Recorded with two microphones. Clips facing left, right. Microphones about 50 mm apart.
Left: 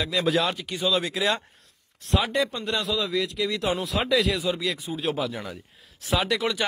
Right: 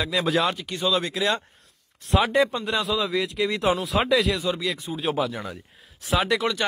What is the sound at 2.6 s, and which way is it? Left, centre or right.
Speech, centre.